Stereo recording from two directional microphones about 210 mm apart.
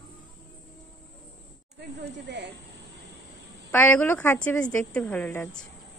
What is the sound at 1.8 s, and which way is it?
Speech, 55° right (ahead or behind).